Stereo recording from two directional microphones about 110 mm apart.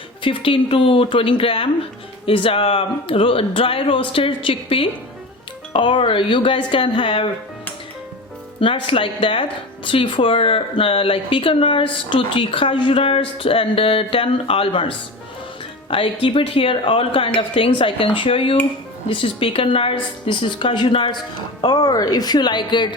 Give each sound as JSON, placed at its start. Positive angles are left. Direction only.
{"t": 0.2, "sound": "speech", "side_deg": 50}
{"t": 8.6, "sound": "a woman's voice", "side_deg": 50}